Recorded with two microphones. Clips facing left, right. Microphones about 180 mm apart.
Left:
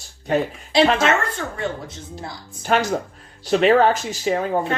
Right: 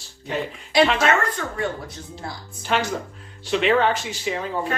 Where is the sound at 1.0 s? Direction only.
25° left (ahead or behind).